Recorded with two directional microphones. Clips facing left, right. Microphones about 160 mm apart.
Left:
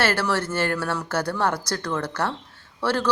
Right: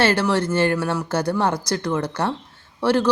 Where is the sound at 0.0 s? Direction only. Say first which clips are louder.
Right 4 dB; 20° right (ahead or behind).